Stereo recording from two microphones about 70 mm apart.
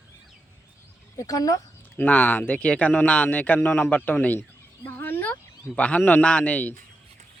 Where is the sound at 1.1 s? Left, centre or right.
Left.